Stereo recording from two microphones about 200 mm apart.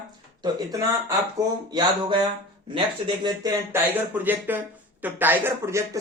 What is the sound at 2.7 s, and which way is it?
Speech, 25° right (ahead or behind).